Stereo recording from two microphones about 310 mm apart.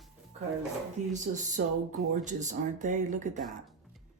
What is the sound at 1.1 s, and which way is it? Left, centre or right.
Speech, right.